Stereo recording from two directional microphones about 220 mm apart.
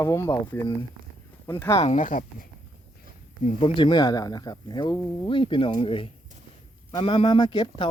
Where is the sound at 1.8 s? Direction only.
35° left (ahead or behind).